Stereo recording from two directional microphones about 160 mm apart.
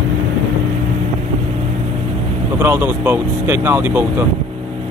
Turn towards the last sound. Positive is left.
turn(degrees=-15)  # may be behind; listen again after turning